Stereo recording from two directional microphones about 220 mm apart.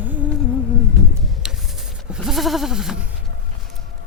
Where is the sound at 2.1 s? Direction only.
Centre (ahead or behind).